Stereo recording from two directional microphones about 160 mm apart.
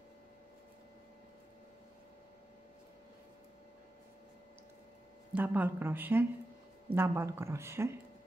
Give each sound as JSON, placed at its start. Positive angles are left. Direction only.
{"t": 5.3, "sound": "speech", "side_deg": -10}